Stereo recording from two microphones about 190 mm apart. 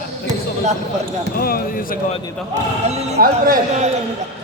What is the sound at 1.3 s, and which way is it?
Speech, 50° left (ahead or behind).